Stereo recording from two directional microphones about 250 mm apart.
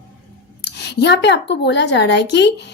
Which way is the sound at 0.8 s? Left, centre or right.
Left.